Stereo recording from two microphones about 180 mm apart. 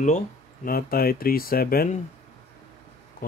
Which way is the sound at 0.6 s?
55° left (ahead or behind).